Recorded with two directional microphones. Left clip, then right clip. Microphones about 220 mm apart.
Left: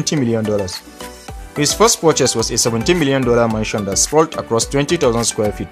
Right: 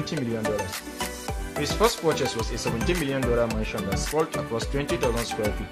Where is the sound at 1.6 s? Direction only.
45° left (ahead or behind).